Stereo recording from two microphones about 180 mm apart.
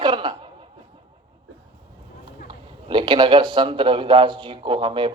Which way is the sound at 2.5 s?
25° right (ahead or behind).